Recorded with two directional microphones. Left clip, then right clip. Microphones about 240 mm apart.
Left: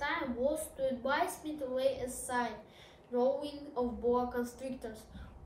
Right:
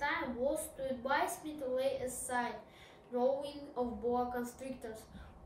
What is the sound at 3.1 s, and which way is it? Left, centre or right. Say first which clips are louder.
A woman's voice: left 2 dB; centre.